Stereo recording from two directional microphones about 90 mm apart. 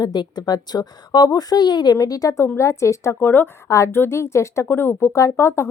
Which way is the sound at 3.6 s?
30° left (ahead or behind).